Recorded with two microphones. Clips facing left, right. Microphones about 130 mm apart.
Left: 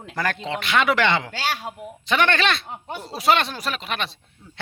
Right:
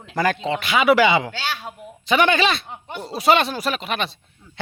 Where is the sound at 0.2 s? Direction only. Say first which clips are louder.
Right 5 dB; 5° right (ahead or behind).